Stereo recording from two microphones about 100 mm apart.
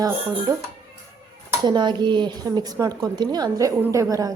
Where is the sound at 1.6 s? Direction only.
50° right (ahead or behind).